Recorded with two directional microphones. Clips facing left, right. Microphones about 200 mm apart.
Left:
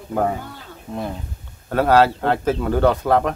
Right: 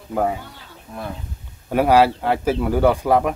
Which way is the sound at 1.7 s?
10° right (ahead or behind).